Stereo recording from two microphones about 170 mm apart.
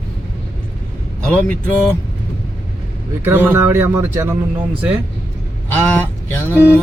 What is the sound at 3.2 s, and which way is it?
Speech, 10° right (ahead or behind).